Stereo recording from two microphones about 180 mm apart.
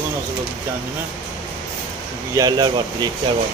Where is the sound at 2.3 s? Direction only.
20° right (ahead or behind).